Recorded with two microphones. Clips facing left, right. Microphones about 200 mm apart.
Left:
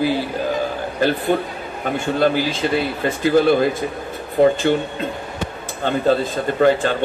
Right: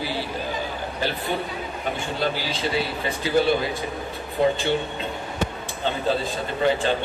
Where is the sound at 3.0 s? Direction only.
50° left (ahead or behind).